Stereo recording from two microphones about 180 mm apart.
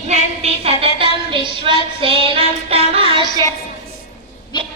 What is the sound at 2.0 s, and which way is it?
Child singing, 30° right (ahead or behind).